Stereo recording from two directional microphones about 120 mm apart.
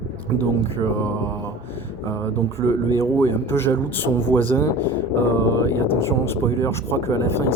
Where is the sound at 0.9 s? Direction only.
15° left (ahead or behind).